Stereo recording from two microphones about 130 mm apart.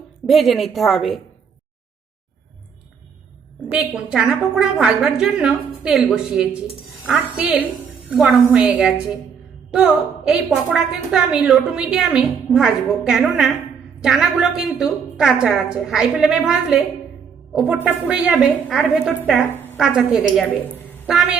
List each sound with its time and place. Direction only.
0.3 s a woman's voice: centre (ahead or behind)
3.7 s a woman's voice: 5° right (ahead or behind)
20.7 s a sound: 15° left (ahead or behind)
21.1 s a woman's voice: 5° right (ahead or behind)